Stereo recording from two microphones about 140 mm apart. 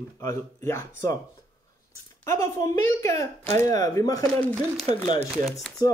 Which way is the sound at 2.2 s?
20° left (ahead or behind).